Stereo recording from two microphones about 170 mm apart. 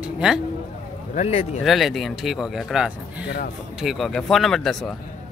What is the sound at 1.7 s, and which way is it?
Speech, centre (ahead or behind).